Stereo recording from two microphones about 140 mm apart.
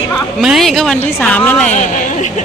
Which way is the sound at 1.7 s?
60° left (ahead or behind).